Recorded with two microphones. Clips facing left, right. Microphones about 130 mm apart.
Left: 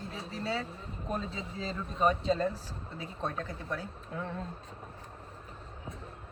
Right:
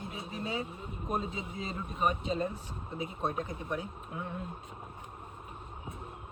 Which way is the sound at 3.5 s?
15° right (ahead or behind).